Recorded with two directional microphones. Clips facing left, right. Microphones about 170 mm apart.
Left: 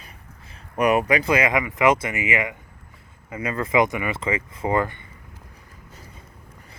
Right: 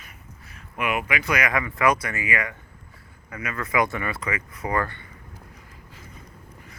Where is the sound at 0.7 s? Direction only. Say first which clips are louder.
Left 8 dB; 40° left (ahead or behind); by 5.0 s 20° left (ahead or behind).